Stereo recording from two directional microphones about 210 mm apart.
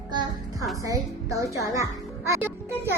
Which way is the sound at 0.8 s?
15° right (ahead or behind).